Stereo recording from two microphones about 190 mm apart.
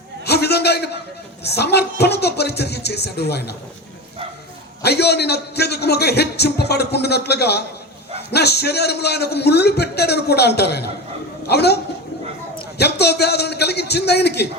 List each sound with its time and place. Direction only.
0.3 s a sound: 60° left (ahead or behind)
1.5 s a man's voice: 60° left (ahead or behind)
4.8 s a man's voice: 60° left (ahead or behind)
12.8 s a man's voice: 60° left (ahead or behind)